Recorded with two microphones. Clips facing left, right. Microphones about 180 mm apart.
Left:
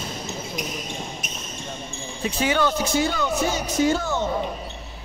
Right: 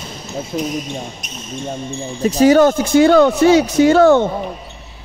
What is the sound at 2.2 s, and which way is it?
Speech, 40° right (ahead or behind).